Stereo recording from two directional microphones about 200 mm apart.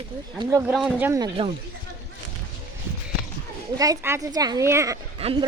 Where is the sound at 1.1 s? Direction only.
25° right (ahead or behind).